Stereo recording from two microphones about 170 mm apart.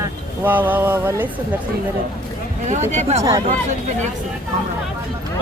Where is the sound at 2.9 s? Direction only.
40° right (ahead or behind).